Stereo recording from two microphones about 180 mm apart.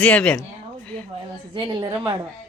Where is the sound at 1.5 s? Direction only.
25° right (ahead or behind).